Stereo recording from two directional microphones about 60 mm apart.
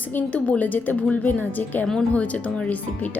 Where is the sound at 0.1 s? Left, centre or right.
Left.